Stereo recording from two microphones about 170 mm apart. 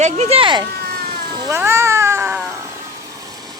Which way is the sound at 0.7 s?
70° right (ahead or behind).